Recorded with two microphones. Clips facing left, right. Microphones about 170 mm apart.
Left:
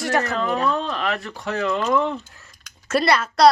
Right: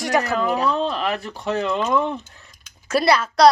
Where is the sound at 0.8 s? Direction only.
35° right (ahead or behind).